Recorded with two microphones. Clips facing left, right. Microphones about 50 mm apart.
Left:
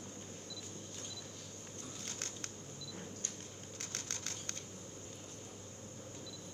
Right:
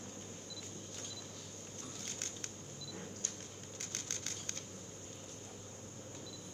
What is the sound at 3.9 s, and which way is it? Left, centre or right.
Train, left.